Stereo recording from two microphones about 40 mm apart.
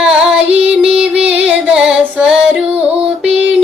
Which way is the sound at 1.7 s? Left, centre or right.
Centre.